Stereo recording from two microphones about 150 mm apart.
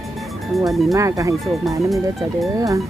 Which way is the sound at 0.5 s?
Centre (ahead or behind).